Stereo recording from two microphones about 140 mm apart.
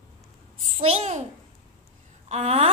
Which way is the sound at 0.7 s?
45° right (ahead or behind).